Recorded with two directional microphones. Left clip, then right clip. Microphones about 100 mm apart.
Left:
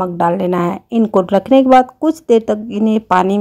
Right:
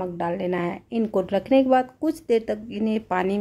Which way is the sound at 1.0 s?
40° left (ahead or behind).